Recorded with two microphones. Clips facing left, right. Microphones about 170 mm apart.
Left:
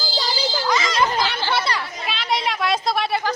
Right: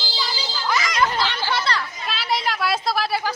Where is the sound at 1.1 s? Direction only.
10° left (ahead or behind).